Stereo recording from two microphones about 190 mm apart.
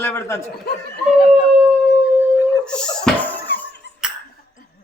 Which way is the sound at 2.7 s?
5° left (ahead or behind).